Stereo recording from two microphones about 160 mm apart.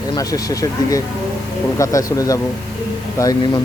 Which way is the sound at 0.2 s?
20° left (ahead or behind).